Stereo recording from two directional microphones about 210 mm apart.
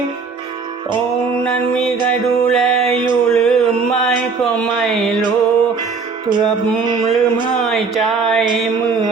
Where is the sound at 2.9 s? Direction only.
20° right (ahead or behind).